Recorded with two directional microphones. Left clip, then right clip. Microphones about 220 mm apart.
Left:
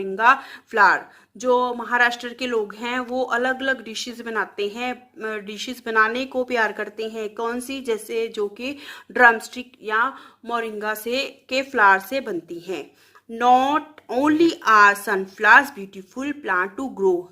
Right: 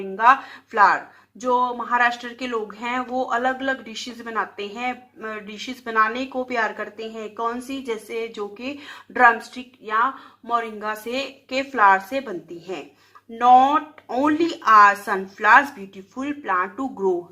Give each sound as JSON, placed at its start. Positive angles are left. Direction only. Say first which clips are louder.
{"t": 0.2, "sound": "speech", "louder": "right 1 dB", "side_deg": 50}